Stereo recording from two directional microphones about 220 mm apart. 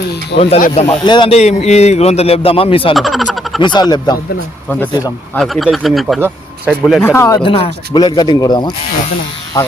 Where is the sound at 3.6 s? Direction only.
20° left (ahead or behind).